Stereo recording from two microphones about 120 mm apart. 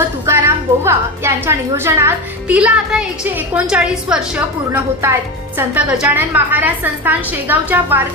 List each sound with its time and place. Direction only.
0.3 s a woman's voice: 20° right (ahead or behind)
2.5 s a woman's voice: 10° right (ahead or behind)